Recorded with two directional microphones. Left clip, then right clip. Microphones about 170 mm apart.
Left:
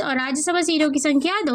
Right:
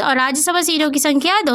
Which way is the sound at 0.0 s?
50° right (ahead or behind).